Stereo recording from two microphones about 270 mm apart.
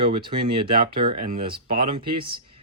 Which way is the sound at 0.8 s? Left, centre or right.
Centre.